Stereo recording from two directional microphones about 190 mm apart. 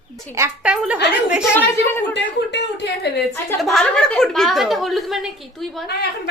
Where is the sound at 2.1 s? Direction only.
65° left (ahead or behind).